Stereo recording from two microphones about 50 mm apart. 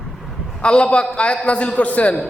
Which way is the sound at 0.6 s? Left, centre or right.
Centre.